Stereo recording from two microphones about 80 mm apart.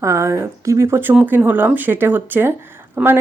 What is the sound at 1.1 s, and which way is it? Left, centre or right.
Speech, right.